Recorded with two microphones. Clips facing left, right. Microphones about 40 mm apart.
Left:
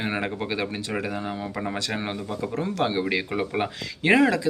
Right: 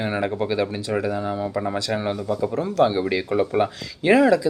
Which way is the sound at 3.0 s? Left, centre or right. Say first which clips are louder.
Right 4 dB; left.